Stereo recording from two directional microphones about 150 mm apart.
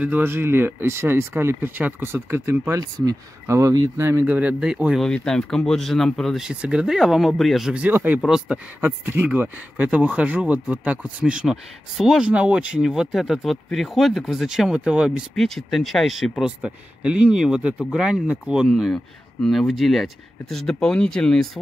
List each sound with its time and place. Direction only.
0.0 s speech: 15° right (ahead or behind)
8.8 s speech: 15° right (ahead or behind); by 21.5 s 5° left (ahead or behind)